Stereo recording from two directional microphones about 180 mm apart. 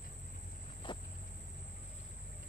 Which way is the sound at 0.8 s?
30° left (ahead or behind).